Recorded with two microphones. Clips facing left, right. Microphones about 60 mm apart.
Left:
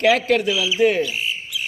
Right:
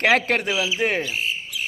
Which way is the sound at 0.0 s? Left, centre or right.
Right.